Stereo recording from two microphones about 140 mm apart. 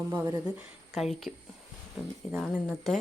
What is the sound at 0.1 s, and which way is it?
Speech, 20° right (ahead or behind).